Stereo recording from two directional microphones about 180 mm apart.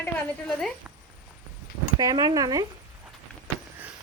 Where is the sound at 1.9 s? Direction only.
20° right (ahead or behind).